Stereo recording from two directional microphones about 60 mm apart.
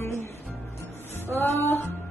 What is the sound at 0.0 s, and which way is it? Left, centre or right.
Music, left.